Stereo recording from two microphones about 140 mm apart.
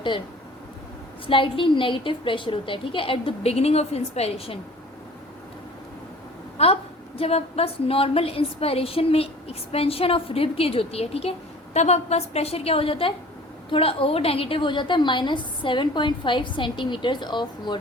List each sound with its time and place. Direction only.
1.3 s a woman's voice: 40° left (ahead or behind)
6.6 s a woman's voice: 45° left (ahead or behind)